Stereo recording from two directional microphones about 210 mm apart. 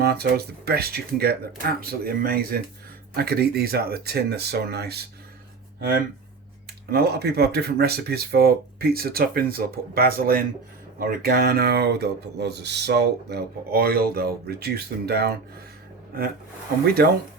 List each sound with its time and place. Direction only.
0.0 s speech: 50° right (ahead or behind)
6.9 s speech: 50° right (ahead or behind)
16.8 s speech: 45° right (ahead or behind)